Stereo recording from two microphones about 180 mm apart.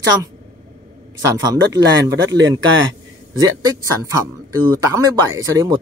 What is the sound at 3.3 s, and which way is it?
Speech, 20° right (ahead or behind).